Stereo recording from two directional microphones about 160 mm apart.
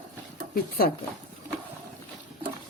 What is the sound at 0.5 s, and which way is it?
Speech, 65° left (ahead or behind).